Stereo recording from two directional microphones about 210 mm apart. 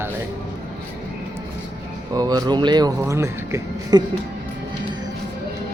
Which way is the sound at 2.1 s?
20° right (ahead or behind).